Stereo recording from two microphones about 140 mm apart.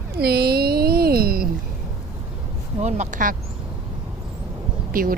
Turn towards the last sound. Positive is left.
turn(degrees=-90)